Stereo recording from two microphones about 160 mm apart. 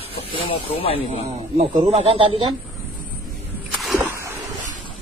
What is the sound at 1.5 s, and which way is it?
Speech, 40° right (ahead or behind).